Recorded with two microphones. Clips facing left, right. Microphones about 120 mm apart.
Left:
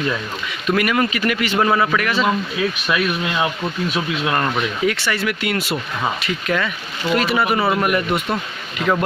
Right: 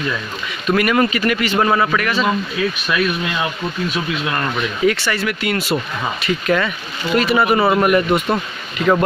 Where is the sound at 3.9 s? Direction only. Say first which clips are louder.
Left 1 dB; 20° left (ahead or behind).